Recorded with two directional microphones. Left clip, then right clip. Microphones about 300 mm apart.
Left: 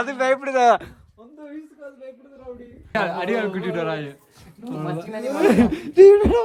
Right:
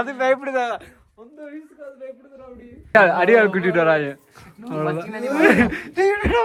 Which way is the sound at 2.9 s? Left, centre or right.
Centre.